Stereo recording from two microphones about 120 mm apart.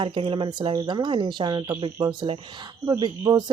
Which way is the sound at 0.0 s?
45° right (ahead or behind).